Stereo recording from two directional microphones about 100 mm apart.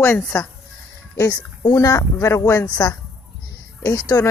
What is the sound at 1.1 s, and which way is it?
A woman's voice, 35° left (ahead or behind).